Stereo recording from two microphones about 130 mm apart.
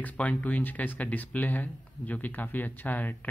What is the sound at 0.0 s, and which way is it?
Speech, 10° left (ahead or behind).